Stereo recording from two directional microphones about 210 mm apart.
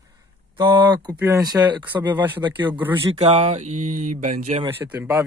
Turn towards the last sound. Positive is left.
turn(degrees=-10)  # may be behind; listen again after turning